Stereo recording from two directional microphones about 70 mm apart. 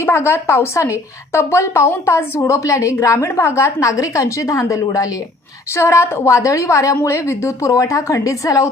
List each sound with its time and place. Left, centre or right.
0.0 s a woman's voice: left